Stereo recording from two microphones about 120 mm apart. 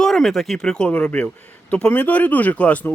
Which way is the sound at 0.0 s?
5° left (ahead or behind).